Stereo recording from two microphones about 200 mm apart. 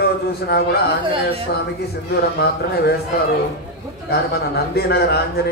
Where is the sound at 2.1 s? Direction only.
55° left (ahead or behind).